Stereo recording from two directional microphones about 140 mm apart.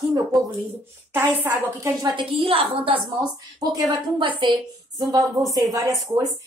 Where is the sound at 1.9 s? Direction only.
30° right (ahead or behind).